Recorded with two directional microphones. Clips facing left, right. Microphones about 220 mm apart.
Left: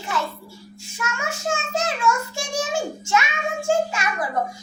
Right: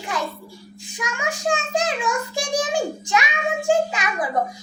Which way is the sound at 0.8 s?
15° right (ahead or behind).